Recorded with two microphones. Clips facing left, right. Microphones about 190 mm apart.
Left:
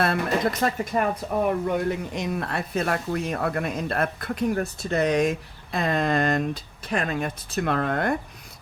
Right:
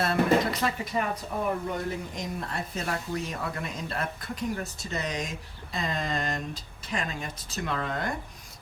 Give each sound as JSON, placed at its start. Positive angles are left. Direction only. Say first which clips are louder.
{"t": 0.0, "sound": "speech", "louder": "left 1 dB", "side_deg": 55}
{"t": 1.7, "sound": "speech", "louder": "left 7 dB", "side_deg": 70}